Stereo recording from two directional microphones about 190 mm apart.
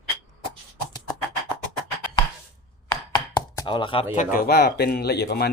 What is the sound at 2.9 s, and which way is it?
Chopping, 15° left (ahead or behind).